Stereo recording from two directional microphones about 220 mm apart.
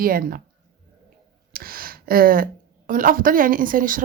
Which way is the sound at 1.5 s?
40° right (ahead or behind).